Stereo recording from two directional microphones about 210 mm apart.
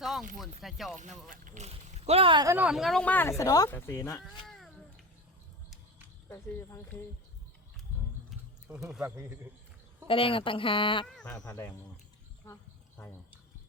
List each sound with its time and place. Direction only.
0.0 s a sound: centre (ahead or behind)
0.6 s speech: centre (ahead or behind)
0.9 s speech: 35° right (ahead or behind)
2.6 s speech: 5° right (ahead or behind); by 4.2 s 15° left (ahead or behind)
4.4 s cat: centre (ahead or behind)
6.2 s speech: 15° left (ahead or behind)
8.3 s a sound: 5° right (ahead or behind)
8.9 s speech: 5° right (ahead or behind)
10.1 s a woman's voice: 25° left (ahead or behind)
11.0 s speech: 5° left (ahead or behind)